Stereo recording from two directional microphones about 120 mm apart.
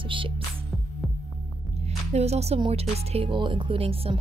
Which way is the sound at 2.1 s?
65° right (ahead or behind).